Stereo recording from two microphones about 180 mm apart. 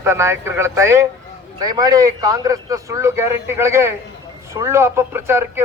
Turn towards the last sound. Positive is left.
turn(degrees=-15)  # may be behind; listen again after turning